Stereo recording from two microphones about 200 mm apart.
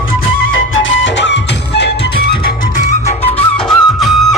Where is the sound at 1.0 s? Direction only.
65° left (ahead or behind).